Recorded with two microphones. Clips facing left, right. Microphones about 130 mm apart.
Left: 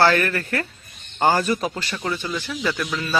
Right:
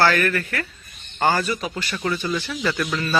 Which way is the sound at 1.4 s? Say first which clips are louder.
Left 3 dB; 40° left (ahead or behind).